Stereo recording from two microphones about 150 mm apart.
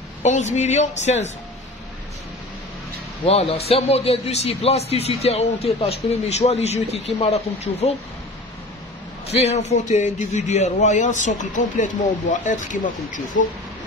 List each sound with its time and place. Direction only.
0.2 s a man's voice: 50° left (ahead or behind)
3.3 s a man's voice: 40° left (ahead or behind)
9.3 s a man's voice: 45° left (ahead or behind)